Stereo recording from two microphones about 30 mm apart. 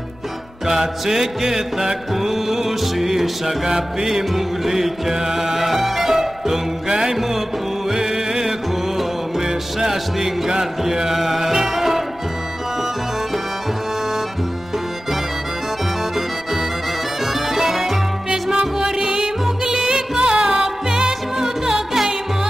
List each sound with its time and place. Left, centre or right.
0.7 s music: centre
4.2 s music: centre
17.2 s music: centre
18.5 s music: right
21.9 s music: centre